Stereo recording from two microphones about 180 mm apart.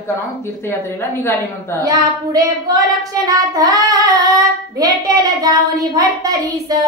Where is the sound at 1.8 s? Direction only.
20° right (ahead or behind).